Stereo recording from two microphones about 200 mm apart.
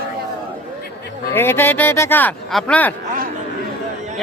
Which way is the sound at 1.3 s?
10° left (ahead or behind).